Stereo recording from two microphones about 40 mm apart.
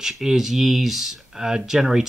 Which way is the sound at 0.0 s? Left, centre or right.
Centre.